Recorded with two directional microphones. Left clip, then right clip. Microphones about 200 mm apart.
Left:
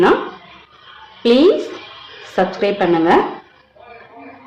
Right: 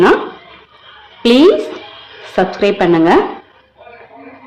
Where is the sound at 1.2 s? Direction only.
25° right (ahead or behind).